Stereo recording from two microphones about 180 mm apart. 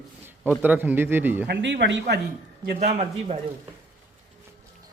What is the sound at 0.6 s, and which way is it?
Speech, 10° right (ahead or behind).